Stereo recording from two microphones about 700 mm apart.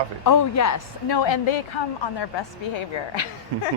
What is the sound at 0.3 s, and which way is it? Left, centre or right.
A woman's voice, left.